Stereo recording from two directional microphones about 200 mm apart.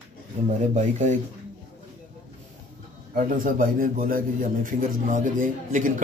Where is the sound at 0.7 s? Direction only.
35° right (ahead or behind).